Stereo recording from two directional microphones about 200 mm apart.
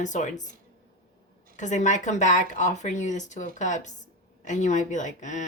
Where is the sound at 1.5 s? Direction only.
35° left (ahead or behind).